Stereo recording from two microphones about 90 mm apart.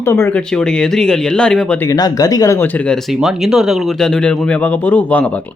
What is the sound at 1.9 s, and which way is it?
Speech, 45° left (ahead or behind).